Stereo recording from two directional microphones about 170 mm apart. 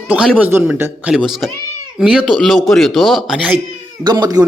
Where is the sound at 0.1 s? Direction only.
10° right (ahead or behind).